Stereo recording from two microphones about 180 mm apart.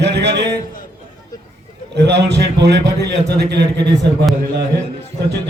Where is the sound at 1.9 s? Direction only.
70° right (ahead or behind).